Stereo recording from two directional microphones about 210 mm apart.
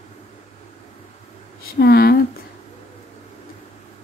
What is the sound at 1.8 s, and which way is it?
Speech, 45° left (ahead or behind).